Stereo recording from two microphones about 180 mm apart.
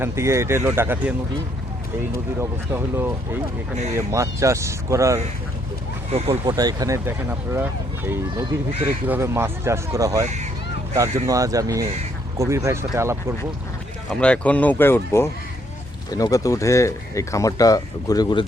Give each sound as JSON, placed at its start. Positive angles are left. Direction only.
{"t": 0.0, "sound": "speech", "side_deg": -15}
{"t": 2.4, "sound": "speech", "side_deg": -15}
{"t": 6.1, "sound": "speech", "side_deg": -30}
{"t": 6.5, "sound": "speech", "side_deg": -20}
{"t": 11.3, "sound": "speech", "side_deg": -20}
{"t": 14.1, "sound": "speech", "side_deg": 5}